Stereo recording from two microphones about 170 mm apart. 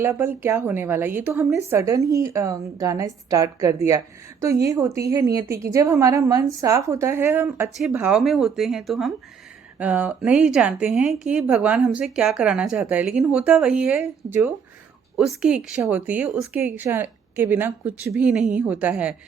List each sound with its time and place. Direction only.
0.0 s a woman's voice: 15° right (ahead or behind)